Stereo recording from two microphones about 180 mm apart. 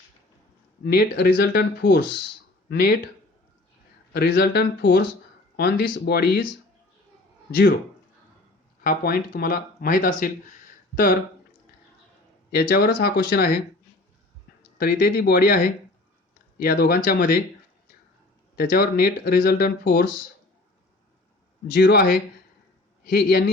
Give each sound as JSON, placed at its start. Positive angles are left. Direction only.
{"t": 0.9, "sound": "speech", "side_deg": 60}
{"t": 4.1, "sound": "speech", "side_deg": 60}
{"t": 5.5, "sound": "speech", "side_deg": 70}
{"t": 8.8, "sound": "speech", "side_deg": 55}
{"t": 12.5, "sound": "speech", "side_deg": 60}
{"t": 14.8, "sound": "speech", "side_deg": 55}
{"t": 18.5, "sound": "speech", "side_deg": 55}
{"t": 21.7, "sound": "speech", "side_deg": 60}